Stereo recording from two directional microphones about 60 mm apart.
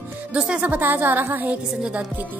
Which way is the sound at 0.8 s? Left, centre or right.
Right.